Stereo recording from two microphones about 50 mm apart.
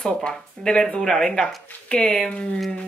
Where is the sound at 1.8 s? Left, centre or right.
Left.